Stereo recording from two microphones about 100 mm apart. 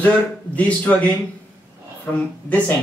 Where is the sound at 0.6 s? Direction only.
15° left (ahead or behind).